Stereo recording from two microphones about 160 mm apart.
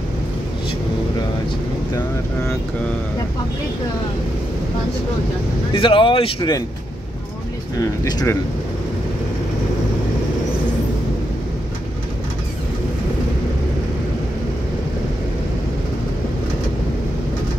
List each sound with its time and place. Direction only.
5.7 s speech: 30° left (ahead or behind)
8.0 s speech: 20° left (ahead or behind)